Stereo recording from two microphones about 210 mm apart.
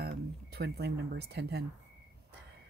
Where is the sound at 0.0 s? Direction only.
50° right (ahead or behind).